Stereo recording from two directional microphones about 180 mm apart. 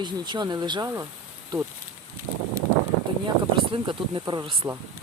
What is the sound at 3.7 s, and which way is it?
Speech, 25° right (ahead or behind).